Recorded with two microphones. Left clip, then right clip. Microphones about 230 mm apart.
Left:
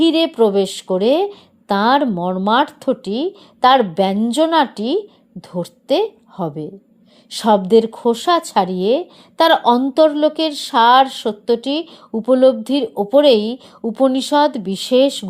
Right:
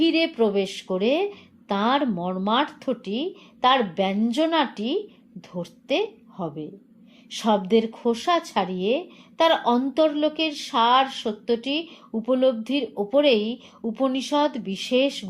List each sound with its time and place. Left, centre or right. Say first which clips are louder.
0.0 s a woman's voice: left 7 dB; left